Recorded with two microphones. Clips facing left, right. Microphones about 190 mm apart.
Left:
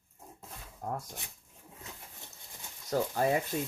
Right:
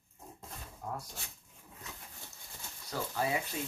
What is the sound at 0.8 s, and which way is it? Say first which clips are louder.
Speech: left 4 dB; 45° left (ahead or behind).